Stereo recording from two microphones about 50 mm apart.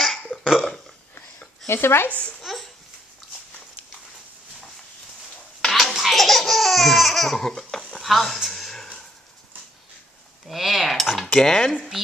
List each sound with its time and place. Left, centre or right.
0.4 s burping: centre
1.7 s speech: left
2.0 s a child's voice: left
2.4 s babbling: centre
5.6 s laughter: centre
8.0 s a sound: centre
10.5 s cutlery: centre
11.3 s speech: centre
11.7 s a woman's voice: centre